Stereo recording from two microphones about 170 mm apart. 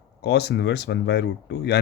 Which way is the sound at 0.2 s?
80° left.